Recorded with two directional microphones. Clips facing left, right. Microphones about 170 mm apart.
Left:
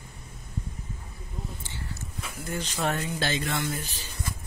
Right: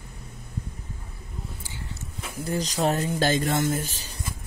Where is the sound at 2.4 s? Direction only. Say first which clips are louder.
Right 5 dB; 35° right (ahead or behind).